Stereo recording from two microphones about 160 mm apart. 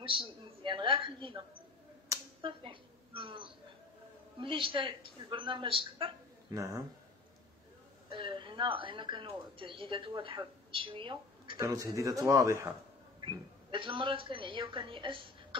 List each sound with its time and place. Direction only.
0.0 s a woman's voice: 35° right (ahead or behind)
2.4 s a woman's voice: 30° right (ahead or behind)
6.5 s speech: 20° right (ahead or behind)
8.1 s a woman's voice: 30° right (ahead or behind)
13.2 s a woman's voice: 30° right (ahead or behind)